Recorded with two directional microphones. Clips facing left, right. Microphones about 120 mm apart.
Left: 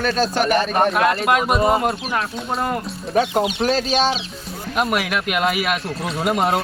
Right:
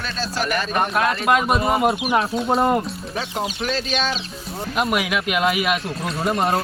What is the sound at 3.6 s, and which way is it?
Speech, 40° left (ahead or behind).